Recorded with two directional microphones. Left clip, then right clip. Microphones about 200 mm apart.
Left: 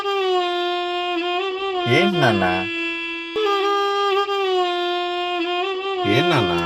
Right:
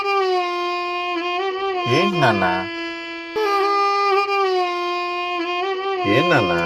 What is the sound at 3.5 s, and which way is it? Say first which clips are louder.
Music: right 2 dB; 5° left (ahead or behind).